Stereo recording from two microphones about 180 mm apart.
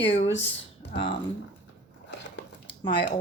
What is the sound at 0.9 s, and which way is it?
Speech, 25° left (ahead or behind).